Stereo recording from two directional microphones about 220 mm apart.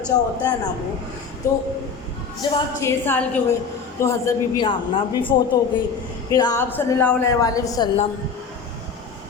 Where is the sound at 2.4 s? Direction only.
20° left (ahead or behind).